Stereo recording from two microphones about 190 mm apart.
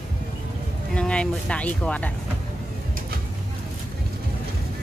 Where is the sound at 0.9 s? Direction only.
5° left (ahead or behind).